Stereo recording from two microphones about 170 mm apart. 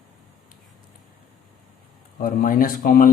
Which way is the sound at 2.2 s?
55° left (ahead or behind).